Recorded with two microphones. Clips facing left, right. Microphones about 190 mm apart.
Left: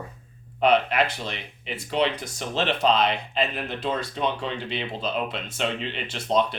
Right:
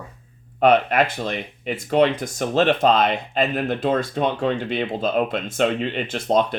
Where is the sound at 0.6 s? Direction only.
50° right (ahead or behind).